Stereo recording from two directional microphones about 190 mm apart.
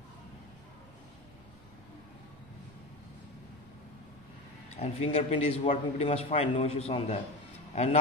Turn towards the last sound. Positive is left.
turn(degrees=35)  # may be behind; listen again after turning